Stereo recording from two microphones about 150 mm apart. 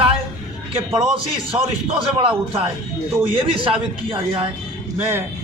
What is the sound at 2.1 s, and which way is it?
A man's voice, 40° right (ahead or behind).